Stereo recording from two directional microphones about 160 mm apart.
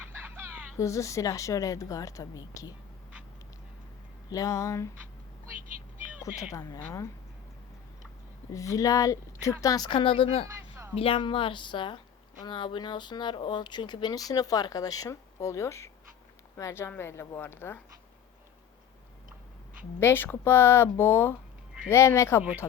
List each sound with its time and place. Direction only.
0.2 s a sound: 15° right (ahead or behind)
0.8 s speech: 20° left (ahead or behind)
4.3 s speech: 20° left (ahead or behind)
6.2 s speech: 20° left (ahead or behind)
8.5 s speech: 20° left (ahead or behind)
20.0 s speech: 15° left (ahead or behind)